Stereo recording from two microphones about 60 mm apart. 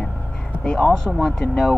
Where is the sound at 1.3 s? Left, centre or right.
Centre.